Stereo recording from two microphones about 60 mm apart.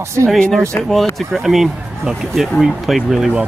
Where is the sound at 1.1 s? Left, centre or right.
Centre.